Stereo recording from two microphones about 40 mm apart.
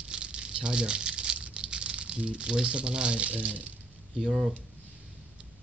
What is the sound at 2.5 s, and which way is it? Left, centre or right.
Speech, right.